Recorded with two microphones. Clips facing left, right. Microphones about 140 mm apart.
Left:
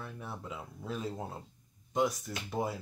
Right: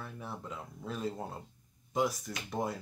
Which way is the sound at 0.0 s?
Centre (ahead or behind).